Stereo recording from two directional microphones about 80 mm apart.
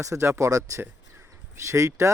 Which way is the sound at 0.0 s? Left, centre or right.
Right.